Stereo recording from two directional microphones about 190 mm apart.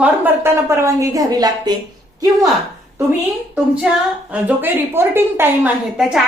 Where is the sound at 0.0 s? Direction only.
15° right (ahead or behind).